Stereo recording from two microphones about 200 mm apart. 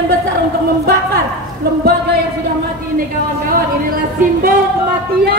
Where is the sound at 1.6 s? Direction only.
55° right (ahead or behind).